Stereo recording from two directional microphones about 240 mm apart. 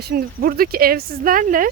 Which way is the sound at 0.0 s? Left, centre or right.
Right.